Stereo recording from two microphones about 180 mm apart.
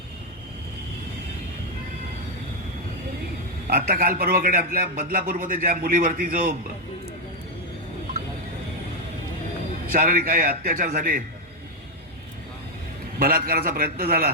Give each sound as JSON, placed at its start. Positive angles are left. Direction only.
{"t": 3.7, "sound": "a man's voice", "side_deg": -55}
{"t": 9.9, "sound": "a man's voice", "side_deg": -50}
{"t": 13.1, "sound": "a man's voice", "side_deg": -55}